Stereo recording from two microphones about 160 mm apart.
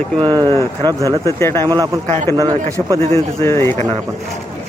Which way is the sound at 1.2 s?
15° left (ahead or behind).